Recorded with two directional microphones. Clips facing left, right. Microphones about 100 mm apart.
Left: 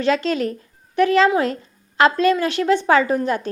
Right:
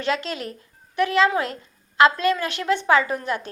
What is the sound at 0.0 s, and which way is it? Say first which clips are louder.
A woman's voice: left 7 dB; 30° left (ahead or behind).